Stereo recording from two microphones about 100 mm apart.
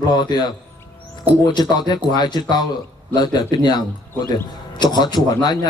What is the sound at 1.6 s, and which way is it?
A man's voice, 45° left (ahead or behind).